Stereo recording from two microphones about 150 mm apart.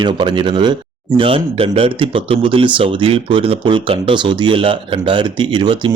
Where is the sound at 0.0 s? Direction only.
30° right (ahead or behind).